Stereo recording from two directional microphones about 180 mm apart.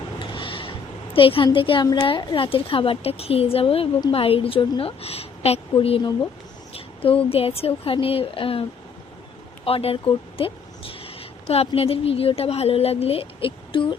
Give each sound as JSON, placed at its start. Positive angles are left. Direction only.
{"t": 0.2, "sound": "vehicle", "side_deg": 30}
{"t": 1.1, "sound": "a woman's voice", "side_deg": 30}
{"t": 9.6, "sound": "speech", "side_deg": 30}